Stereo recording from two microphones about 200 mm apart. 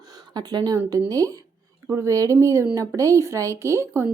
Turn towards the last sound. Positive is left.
turn(degrees=-10)  # may be behind; listen again after turning